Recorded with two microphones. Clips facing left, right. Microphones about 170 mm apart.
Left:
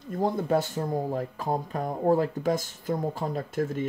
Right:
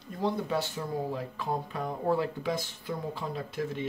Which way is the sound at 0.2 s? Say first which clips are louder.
Left 4 dB; 45° left (ahead or behind).